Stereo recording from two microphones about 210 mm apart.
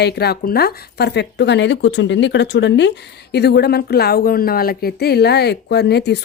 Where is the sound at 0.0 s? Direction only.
50° left (ahead or behind).